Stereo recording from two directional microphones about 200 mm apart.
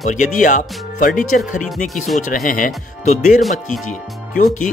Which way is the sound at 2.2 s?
40° left (ahead or behind).